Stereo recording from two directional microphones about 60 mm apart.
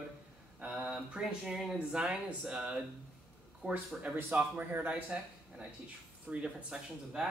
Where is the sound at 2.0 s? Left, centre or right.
Centre.